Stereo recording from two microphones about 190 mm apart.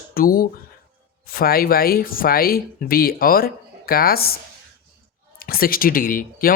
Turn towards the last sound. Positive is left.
turn(degrees=50)  # may be behind; listen again after turning